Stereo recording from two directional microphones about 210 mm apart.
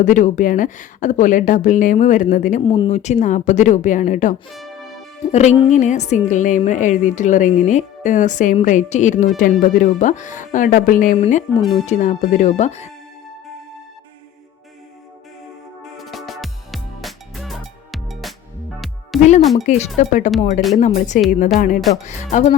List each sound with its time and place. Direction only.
0.0 s a woman's voice: 35° left (ahead or behind)
2.6 s a woman's voice: 25° left (ahead or behind)
15.8 s music: centre (ahead or behind)
19.5 s a woman's voice: 30° left (ahead or behind)
21.8 s speech: centre (ahead or behind)
22.0 s a woman's voice: 35° left (ahead or behind)